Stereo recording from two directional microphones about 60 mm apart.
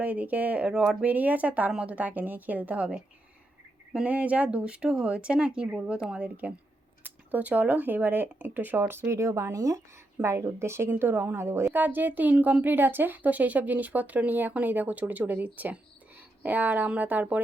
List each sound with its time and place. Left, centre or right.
0.0 s speech: right
4.0 s a woman's voice: right
6.2 s speech: right
10.8 s speech: right
11.3 s speech: right